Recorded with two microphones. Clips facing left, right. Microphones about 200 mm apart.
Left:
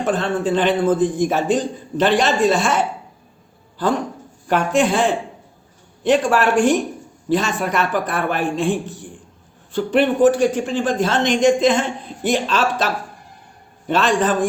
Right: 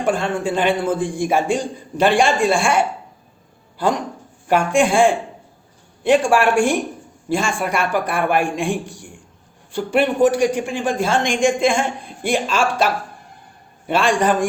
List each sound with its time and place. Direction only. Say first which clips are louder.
0.0 s a man's voice: even; 10° right (ahead or behind)